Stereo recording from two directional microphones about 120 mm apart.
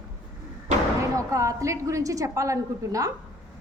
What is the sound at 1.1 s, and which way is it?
A woman's voice, 25° right (ahead or behind).